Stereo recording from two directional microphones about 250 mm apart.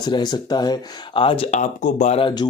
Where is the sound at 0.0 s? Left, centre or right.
Centre.